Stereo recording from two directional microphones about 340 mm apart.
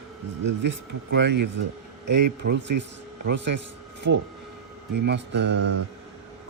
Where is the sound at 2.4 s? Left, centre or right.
Right.